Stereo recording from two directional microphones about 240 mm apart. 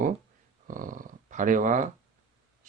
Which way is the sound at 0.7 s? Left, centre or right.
Right.